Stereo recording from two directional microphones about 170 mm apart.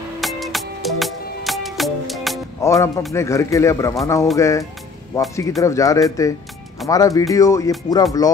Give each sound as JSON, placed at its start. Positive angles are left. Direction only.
{"t": 0.2, "sound": "music", "side_deg": 0}
{"t": 2.6, "sound": "speech", "side_deg": 15}